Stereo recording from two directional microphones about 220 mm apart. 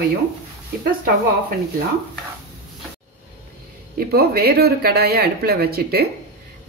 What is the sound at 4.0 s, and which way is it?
A woman's voice, 45° right (ahead or behind).